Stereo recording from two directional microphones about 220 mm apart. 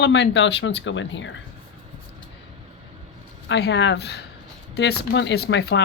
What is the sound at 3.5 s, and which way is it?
Speech, 50° left (ahead or behind).